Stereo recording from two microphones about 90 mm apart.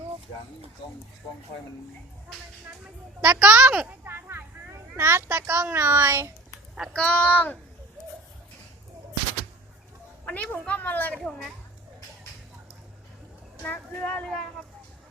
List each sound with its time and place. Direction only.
2.8 s a woman's voice: 15° right (ahead or behind)
6.9 s a woman's voice: 15° left (ahead or behind)
10.2 s a woman's voice: 15° left (ahead or behind)
11.2 s a child's voice: centre (ahead or behind)
13.6 s a woman's voice: 15° left (ahead or behind)